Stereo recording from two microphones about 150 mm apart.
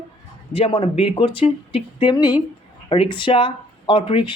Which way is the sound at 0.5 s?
35° left (ahead or behind).